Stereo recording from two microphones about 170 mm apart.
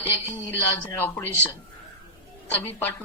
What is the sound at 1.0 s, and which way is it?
Speech, 10° left (ahead or behind).